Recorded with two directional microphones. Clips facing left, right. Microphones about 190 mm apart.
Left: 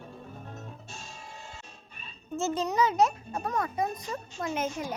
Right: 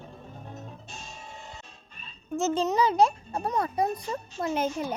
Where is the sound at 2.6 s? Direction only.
30° right (ahead or behind).